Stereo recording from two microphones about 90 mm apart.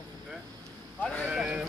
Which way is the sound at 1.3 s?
10° right (ahead or behind).